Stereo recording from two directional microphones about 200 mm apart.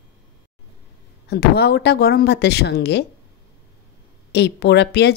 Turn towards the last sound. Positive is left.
turn(degrees=55)  # may be behind; listen again after turning